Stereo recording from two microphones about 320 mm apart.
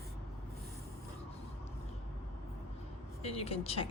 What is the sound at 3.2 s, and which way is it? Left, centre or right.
Speech, centre.